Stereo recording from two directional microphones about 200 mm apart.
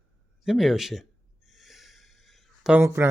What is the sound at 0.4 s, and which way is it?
Speech, centre (ahead or behind).